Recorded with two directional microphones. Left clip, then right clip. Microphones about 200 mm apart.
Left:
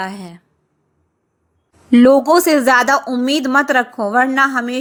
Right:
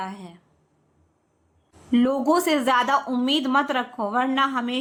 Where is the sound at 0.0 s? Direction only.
30° left (ahead or behind).